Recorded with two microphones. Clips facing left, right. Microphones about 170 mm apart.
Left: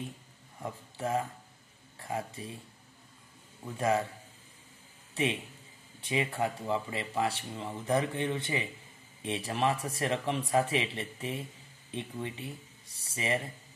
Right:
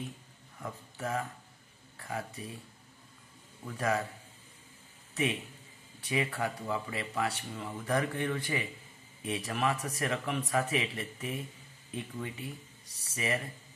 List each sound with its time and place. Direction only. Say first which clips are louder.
0.6 s speech: left 2 dB; 30° left (ahead or behind)
3.6 s speech: left 3 dB; 25° left (ahead or behind)
5.1 s a man's voice: left 1 dB; 30° left (ahead or behind)